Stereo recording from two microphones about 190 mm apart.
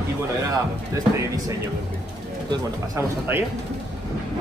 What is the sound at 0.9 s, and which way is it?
Speech, 15° right (ahead or behind).